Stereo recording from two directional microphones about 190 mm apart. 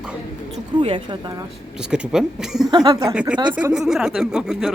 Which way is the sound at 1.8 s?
5° right (ahead or behind).